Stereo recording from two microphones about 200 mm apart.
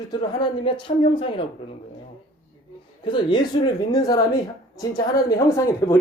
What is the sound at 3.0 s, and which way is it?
A woman's voice, 20° left (ahead or behind).